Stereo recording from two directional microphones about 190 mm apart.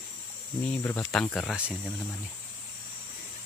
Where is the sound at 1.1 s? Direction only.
5° left (ahead or behind).